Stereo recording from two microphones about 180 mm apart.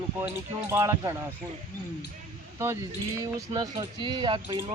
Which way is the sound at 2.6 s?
15° right (ahead or behind).